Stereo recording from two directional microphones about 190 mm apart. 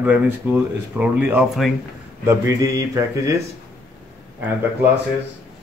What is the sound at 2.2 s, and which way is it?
Speech, 15° right (ahead or behind).